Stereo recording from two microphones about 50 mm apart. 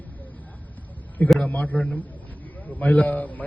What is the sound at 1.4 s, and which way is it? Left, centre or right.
A man's voice, left.